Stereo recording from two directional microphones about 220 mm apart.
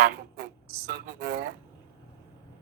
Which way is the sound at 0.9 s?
45° right (ahead or behind).